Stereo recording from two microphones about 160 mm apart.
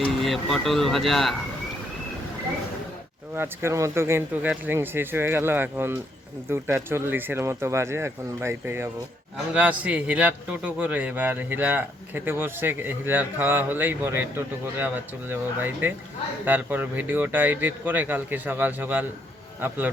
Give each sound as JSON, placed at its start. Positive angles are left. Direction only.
{"t": 0.2, "sound": "speech", "side_deg": 0}
{"t": 3.3, "sound": "a man's voice", "side_deg": -15}